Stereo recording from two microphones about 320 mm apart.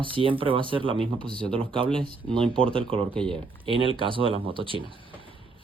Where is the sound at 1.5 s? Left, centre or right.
Centre.